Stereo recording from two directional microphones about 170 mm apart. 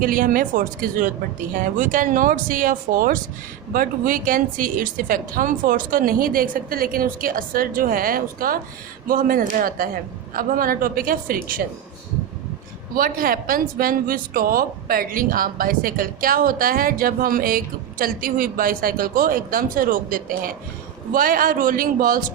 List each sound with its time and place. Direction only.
0.0 s speech: 55° right (ahead or behind)
12.9 s speech: 55° right (ahead or behind)